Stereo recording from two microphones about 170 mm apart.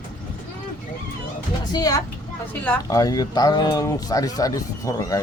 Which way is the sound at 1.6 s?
25° left (ahead or behind).